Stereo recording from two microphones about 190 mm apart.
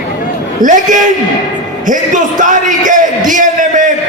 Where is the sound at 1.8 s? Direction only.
40° right (ahead or behind).